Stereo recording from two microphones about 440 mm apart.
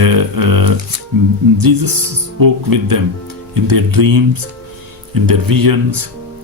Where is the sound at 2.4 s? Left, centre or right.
Right.